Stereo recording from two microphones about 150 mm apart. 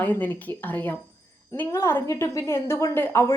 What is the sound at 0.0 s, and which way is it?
Speech, 10° left (ahead or behind).